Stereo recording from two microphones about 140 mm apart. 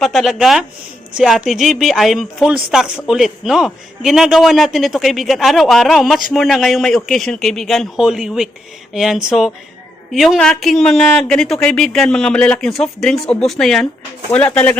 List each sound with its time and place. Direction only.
0.0 s speech: centre (ahead or behind)